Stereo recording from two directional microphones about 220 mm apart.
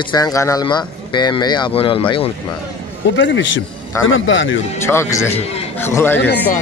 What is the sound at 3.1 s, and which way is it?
A man's voice, 55° left (ahead or behind).